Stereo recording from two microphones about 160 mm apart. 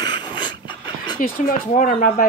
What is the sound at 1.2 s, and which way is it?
Speech, 60° left (ahead or behind).